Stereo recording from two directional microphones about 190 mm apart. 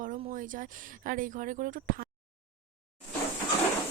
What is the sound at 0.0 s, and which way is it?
Speech, 45° right (ahead or behind).